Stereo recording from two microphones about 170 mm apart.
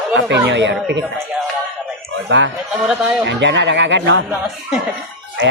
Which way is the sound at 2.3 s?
90° right.